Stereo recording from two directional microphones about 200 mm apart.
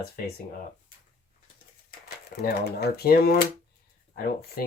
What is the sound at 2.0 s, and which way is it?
Speech, 50° left (ahead or behind).